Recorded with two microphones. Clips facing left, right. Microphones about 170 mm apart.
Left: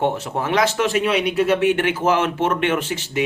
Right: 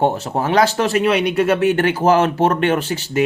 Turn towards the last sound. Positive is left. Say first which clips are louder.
# right 3 dB
turn(degrees=-35)  # may be behind; listen again after turning